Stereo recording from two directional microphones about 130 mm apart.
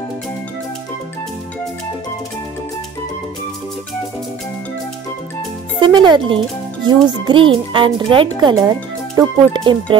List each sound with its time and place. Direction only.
5.8 s a child's voice: 35° right (ahead or behind)